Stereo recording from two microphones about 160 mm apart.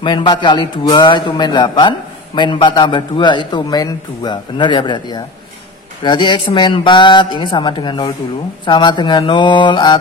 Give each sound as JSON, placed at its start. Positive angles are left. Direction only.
{"t": 0.0, "sound": "a man's voice", "side_deg": 30}